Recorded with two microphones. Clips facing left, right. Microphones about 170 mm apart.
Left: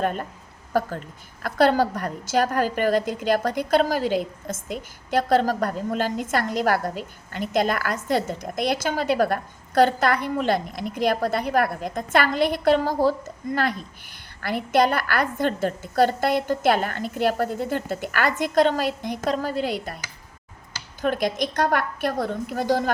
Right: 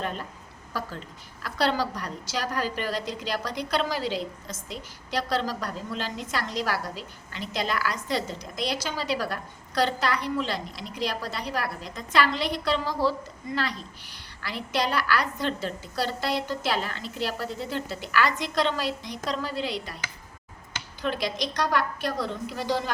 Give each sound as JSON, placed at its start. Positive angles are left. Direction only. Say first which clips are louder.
{"t": 0.0, "sound": "a woman's voice", "louder": "left 7 dB", "side_deg": 50}
{"t": 21.0, "sound": "a woman's voice", "louder": "left 5 dB", "side_deg": 50}